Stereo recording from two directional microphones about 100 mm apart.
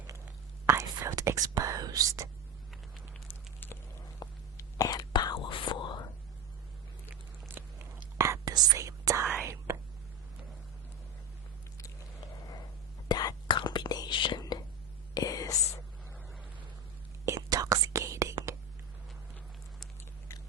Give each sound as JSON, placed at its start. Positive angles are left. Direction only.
{"t": 0.7, "sound": "whispering", "side_deg": -30}
{"t": 3.2, "sound": "a sound", "side_deg": 20}
{"t": 4.2, "sound": "whispering", "side_deg": 40}
{"t": 7.5, "sound": "biting", "side_deg": -20}
{"t": 8.2, "sound": "whispering", "side_deg": -30}
{"t": 13.1, "sound": "whispering", "side_deg": 45}
{"t": 15.1, "sound": "whispering", "side_deg": 40}
{"t": 17.2, "sound": "whispering", "side_deg": -35}